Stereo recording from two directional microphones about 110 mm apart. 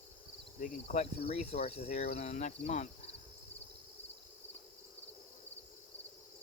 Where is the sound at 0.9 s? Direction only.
75° left (ahead or behind).